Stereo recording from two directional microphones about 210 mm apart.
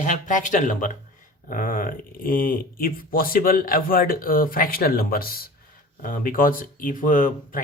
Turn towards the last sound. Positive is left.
turn(degrees=40)  # may be behind; listen again after turning